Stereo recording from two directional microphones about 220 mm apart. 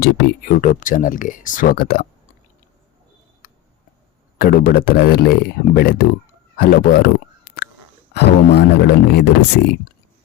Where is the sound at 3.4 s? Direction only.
40° left (ahead or behind).